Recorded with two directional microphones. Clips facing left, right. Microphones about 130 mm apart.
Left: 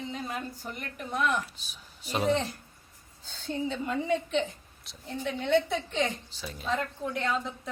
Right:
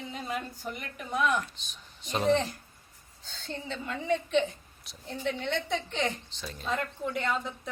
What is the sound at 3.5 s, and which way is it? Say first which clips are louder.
A woman's voice: left 5 dB; 5° left (ahead or behind).